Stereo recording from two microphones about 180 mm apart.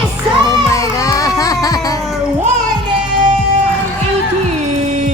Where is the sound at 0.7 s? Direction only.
20° left (ahead or behind).